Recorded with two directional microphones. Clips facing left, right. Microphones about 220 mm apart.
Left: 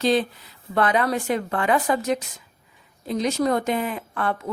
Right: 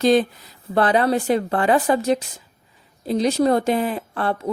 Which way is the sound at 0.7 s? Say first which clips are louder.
Right 4 dB; 30° right (ahead or behind).